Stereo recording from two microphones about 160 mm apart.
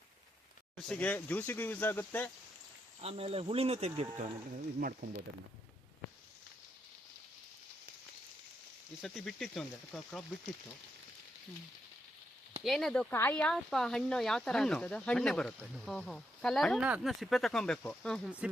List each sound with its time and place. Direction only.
0.8 s speech: 5° left (ahead or behind)
3.0 s speech: 40° right (ahead or behind)
4.8 s speech: 65° right (ahead or behind)
9.0 s speech: centre (ahead or behind)
12.6 s speech: centre (ahead or behind)
18.3 s speech: 10° right (ahead or behind)